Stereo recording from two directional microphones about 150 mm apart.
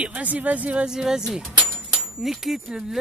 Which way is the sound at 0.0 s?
10° right (ahead or behind).